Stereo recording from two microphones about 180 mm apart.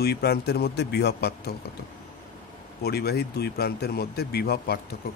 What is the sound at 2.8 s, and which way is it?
Speech, 65° left (ahead or behind).